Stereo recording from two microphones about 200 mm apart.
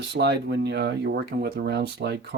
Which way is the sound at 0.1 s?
55° right (ahead or behind).